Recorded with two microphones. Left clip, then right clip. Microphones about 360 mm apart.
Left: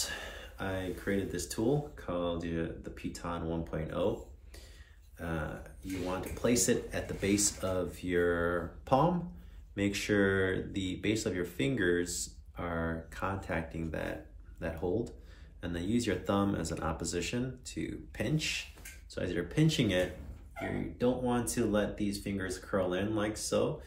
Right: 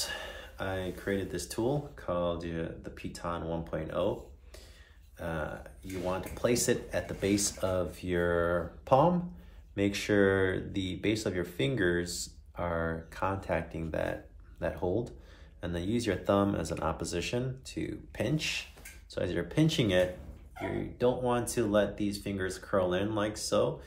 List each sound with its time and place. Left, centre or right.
0.0 s speech: centre
5.2 s speech: centre